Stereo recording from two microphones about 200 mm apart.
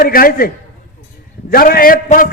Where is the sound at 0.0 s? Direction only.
45° left (ahead or behind).